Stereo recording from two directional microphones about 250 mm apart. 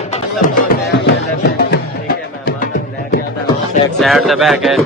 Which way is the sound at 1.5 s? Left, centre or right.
Left.